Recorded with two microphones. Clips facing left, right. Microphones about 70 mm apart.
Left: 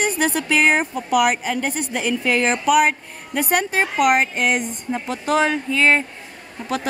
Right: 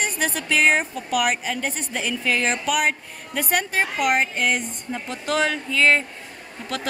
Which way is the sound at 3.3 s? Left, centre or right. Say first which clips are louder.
Left 3 dB; centre.